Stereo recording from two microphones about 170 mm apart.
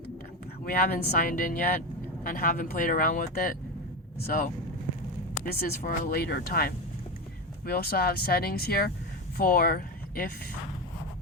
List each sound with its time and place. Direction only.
0.6 s speech: 60° left (ahead or behind)
5.8 s speech: 65° left (ahead or behind)